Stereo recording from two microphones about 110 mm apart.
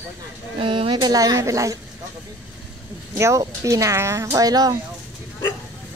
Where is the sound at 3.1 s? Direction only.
25° right (ahead or behind).